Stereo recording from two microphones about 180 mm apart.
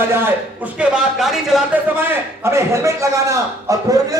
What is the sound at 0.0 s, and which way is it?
A man's voice, 10° right (ahead or behind).